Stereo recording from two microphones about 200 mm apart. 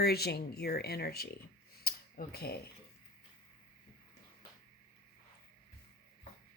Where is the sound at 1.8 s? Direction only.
50° left (ahead or behind).